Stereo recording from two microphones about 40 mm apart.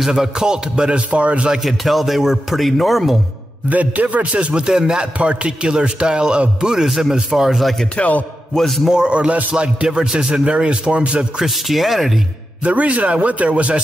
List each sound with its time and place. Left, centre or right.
0.0 s a man's voice: centre; by 1.5 s right
1.6 s a man's voice: centre
3.6 s a man's voice: right; by 7.6 s centre
8.0 s a man's voice: left
8.5 s a man's voice: centre
8.9 s a man's voice: right
11.4 s a man's voice: centre
12.6 s a man's voice: right